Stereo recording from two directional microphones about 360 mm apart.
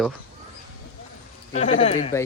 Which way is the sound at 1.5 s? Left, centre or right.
Centre.